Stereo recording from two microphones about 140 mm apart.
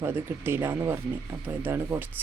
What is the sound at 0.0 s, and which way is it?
Speech, 15° right (ahead or behind).